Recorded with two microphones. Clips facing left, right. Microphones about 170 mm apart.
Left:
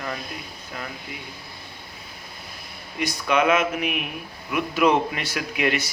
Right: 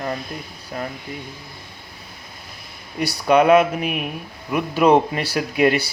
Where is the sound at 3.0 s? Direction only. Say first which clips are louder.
Right 6 dB; 35° right (ahead or behind).